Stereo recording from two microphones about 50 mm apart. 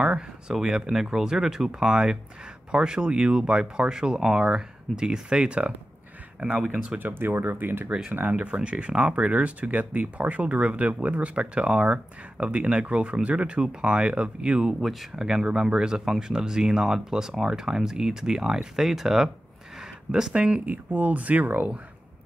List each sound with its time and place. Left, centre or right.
0.0 s speech: centre
7.0 s speech: right; by 14.8 s centre
14.8 s speech: centre
19.8 s a sound: centre
20.3 s speech: right
20.6 s speech: right